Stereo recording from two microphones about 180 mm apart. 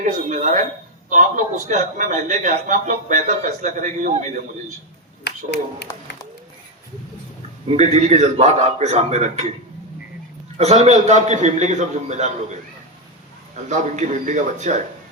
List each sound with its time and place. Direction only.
0.0 s a man's voice: 45° right (ahead or behind)
5.2 s speech: 65° left (ahead or behind)
7.8 s a man's voice: 40° right (ahead or behind)
10.6 s a man's voice: 40° right (ahead or behind)
13.7 s a man's voice: 40° right (ahead or behind)